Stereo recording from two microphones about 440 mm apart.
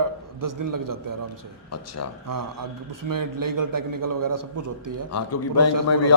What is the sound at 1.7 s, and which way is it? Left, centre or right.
Speech, left.